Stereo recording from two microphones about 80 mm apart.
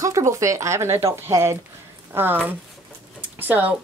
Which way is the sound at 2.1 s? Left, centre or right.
Right.